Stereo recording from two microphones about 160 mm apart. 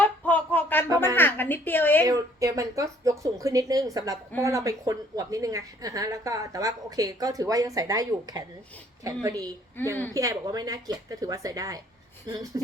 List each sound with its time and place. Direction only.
0.0 s a sound: 10° left (ahead or behind)
1.1 s a woman's voice: 10° left (ahead or behind)
2.0 s a woman's voice: 20° right (ahead or behind)